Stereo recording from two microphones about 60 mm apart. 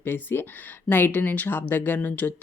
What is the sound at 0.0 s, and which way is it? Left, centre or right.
Speech, left.